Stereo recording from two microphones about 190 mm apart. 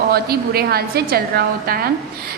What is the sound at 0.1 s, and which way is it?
A woman's voice, 55° right (ahead or behind).